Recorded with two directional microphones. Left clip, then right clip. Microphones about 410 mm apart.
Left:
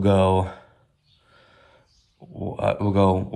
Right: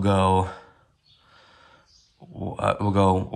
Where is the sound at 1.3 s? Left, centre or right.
Centre.